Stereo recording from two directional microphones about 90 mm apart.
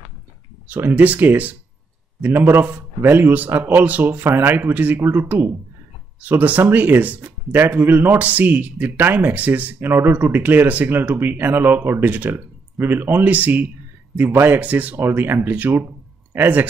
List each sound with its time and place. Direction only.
0.7 s speech: 20° right (ahead or behind)